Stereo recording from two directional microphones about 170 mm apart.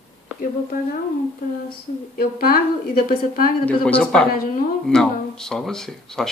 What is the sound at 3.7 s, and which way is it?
Speech, 5° left (ahead or behind).